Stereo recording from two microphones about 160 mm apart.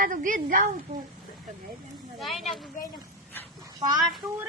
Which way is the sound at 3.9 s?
20° right (ahead or behind).